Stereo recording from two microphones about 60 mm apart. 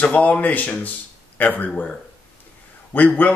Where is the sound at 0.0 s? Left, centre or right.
Left.